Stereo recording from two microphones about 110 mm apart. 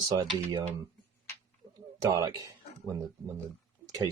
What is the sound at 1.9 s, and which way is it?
Speech, 35° right (ahead or behind).